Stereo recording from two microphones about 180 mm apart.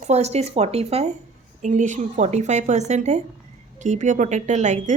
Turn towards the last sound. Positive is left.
turn(degrees=-40)  # may be behind; listen again after turning